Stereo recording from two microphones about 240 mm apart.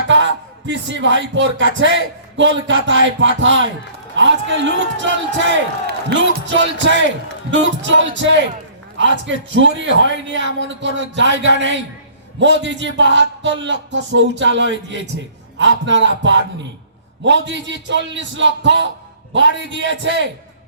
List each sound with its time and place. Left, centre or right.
0.7 s speech: right